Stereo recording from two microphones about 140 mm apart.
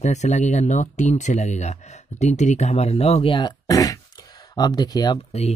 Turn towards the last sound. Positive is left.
turn(degrees=30)  # may be behind; listen again after turning